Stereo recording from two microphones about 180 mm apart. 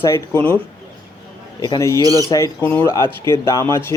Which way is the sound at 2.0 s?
20° right (ahead or behind).